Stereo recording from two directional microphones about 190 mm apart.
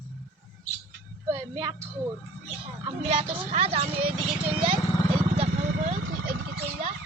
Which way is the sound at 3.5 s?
30° right (ahead or behind).